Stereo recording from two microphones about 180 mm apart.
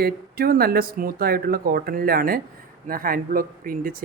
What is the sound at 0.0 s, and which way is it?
A man's voice, 55° right (ahead or behind).